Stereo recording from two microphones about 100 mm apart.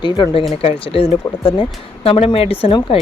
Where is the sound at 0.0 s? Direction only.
45° left (ahead or behind).